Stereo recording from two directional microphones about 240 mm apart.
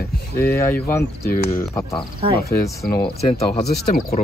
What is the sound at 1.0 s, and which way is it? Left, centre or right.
Speech, left.